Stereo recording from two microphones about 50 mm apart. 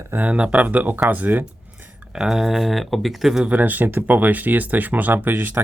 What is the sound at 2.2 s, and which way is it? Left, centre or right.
Speech, centre.